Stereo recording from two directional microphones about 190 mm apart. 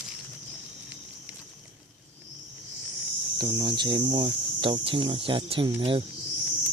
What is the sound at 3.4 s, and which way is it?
Speech, 20° right (ahead or behind).